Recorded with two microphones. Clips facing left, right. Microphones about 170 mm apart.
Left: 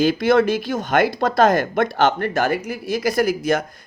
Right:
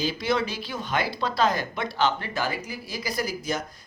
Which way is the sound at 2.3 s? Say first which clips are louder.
Left 9 dB; 60° left (ahead or behind).